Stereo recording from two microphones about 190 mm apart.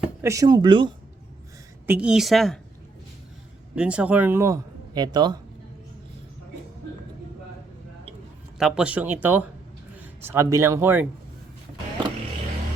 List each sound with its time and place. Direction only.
0.2 s speech: 15° right (ahead or behind)
1.9 s a woman's voice: 5° right (ahead or behind)
3.8 s speech: 5° right (ahead or behind); by 5.4 s 20° right (ahead or behind)
8.5 s a man's voice: 5° right (ahead or behind)